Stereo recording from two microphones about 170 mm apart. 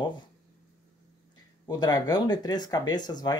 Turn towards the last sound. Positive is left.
turn(degrees=25)  # may be behind; listen again after turning